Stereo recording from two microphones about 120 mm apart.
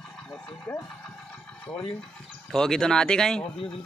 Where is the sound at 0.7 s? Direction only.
10° left (ahead or behind).